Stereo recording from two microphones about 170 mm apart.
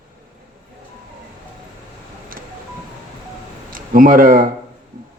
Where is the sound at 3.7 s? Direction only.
55° right (ahead or behind).